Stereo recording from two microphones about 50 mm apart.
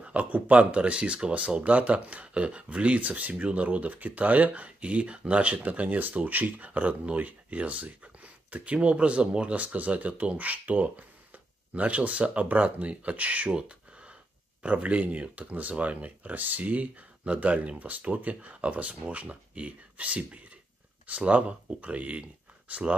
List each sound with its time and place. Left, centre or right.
0.0 s speech: right